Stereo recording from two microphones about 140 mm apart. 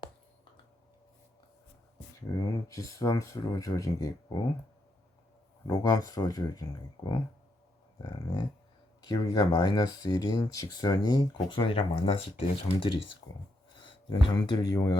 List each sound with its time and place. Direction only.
2.3 s speech: 25° left (ahead or behind)
5.6 s speech: 25° left (ahead or behind); by 12.5 s 40° left (ahead or behind)
13.8 s speech: 35° left (ahead or behind)